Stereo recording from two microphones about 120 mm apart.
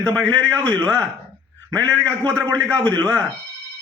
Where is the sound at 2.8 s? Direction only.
10° left (ahead or behind).